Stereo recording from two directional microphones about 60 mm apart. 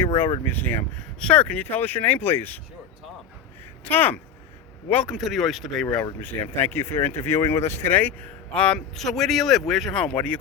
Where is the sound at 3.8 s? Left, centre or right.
Left.